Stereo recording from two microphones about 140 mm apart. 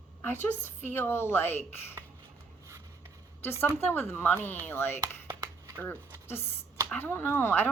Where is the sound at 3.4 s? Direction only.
15° left (ahead or behind).